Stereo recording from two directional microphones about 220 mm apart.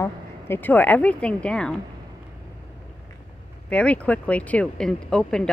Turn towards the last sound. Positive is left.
turn(degrees=5)  # may be behind; listen again after turning